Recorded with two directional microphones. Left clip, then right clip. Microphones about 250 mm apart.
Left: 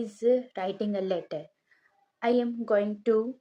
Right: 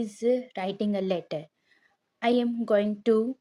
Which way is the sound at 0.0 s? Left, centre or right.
Right.